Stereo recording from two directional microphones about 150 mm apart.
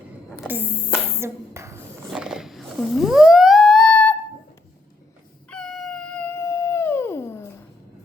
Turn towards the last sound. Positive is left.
turn(degrees=15)  # may be behind; listen again after turning